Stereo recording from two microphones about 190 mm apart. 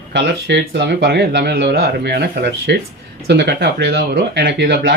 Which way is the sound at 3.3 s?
60° right (ahead or behind).